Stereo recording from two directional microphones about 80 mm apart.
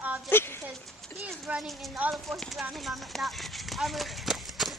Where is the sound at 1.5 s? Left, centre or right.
Centre.